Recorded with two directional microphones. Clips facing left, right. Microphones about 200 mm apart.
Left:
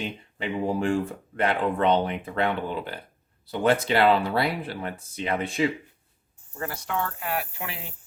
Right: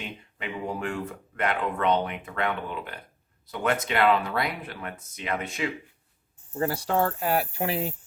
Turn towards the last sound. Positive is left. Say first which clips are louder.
# right 9 dB
turn(degrees=-35)  # may be behind; listen again after turning